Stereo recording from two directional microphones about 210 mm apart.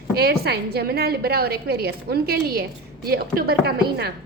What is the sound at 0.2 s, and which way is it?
A woman's voice, 50° right (ahead or behind).